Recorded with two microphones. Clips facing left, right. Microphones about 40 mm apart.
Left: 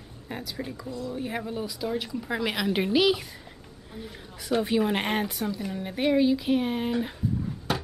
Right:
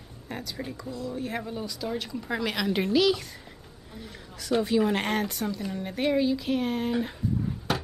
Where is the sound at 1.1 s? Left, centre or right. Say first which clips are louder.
Left 1 dB; centre.